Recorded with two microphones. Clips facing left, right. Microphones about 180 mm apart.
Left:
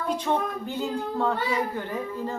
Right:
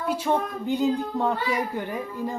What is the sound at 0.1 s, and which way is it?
A child's voice, 10° right (ahead or behind).